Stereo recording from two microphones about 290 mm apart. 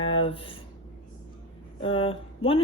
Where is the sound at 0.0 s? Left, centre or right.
Centre.